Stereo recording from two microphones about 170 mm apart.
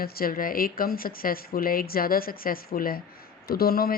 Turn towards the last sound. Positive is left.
turn(degrees=60)  # may be behind; listen again after turning